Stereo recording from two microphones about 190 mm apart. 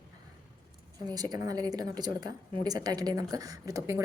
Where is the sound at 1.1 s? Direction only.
20° right (ahead or behind).